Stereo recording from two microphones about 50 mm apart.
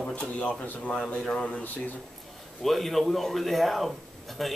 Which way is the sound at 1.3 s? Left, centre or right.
Left.